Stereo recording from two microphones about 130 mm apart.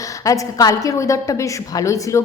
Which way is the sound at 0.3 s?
25° left (ahead or behind).